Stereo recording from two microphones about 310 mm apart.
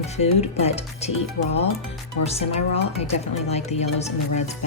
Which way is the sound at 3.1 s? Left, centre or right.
Left.